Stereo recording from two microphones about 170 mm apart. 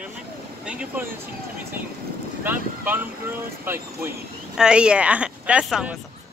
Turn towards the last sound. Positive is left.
turn(degrees=-5)  # may be behind; listen again after turning